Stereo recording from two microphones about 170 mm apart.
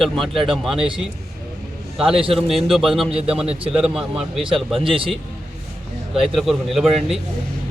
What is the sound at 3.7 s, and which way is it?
Speech, 5° right (ahead or behind).